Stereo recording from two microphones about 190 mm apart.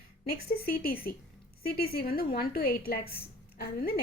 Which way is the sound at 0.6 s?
50° left (ahead or behind).